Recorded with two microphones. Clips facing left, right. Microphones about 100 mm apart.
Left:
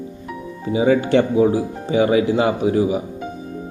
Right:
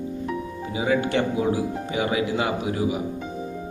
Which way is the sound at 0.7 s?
30° left (ahead or behind).